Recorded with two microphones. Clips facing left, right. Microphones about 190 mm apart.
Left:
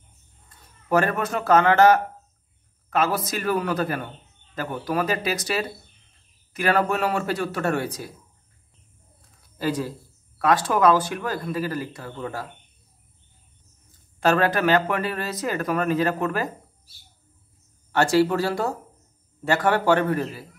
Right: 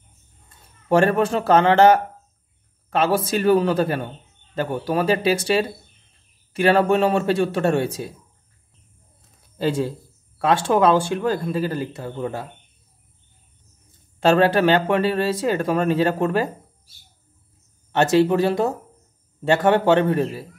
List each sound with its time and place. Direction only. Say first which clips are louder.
0.5 s speech: right 4 dB; 30° right (ahead or behind)
9.6 s speech: right 4 dB; 25° right (ahead or behind)
14.2 s speech: right 4 dB; 25° right (ahead or behind)
17.9 s speech: right 3 dB; 20° right (ahead or behind)